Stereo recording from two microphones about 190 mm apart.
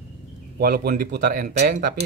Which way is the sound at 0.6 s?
50° right (ahead or behind).